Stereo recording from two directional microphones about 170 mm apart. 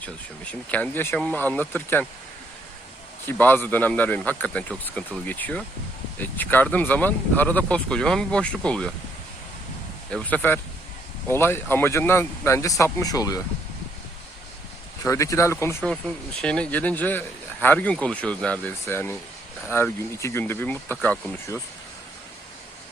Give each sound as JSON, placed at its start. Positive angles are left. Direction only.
{"t": 0.0, "sound": "speech", "side_deg": 10}
{"t": 3.2, "sound": "speech", "side_deg": 10}
{"t": 10.1, "sound": "speech", "side_deg": 5}
{"t": 15.0, "sound": "speech", "side_deg": 15}
{"t": 15.8, "sound": "speech", "side_deg": 5}